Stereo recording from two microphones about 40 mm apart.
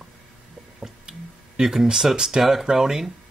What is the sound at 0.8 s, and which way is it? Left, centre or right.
Speech, centre.